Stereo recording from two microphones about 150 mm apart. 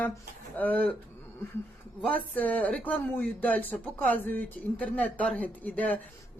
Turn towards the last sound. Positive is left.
turn(degrees=10)  # may be behind; listen again after turning